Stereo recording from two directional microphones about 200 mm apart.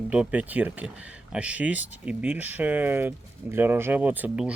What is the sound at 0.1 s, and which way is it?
Speech, 5° right (ahead or behind).